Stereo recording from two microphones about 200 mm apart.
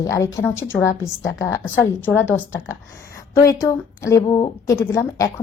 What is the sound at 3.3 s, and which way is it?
A woman's voice, 15° left (ahead or behind).